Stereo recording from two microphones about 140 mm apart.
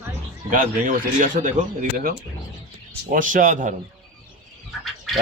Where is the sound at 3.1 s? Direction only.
70° right (ahead or behind).